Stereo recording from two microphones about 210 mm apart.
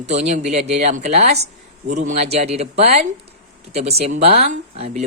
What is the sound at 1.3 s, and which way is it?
Speech, 50° right (ahead or behind).